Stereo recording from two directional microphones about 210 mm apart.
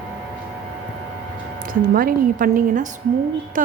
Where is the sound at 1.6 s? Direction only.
45° right (ahead or behind).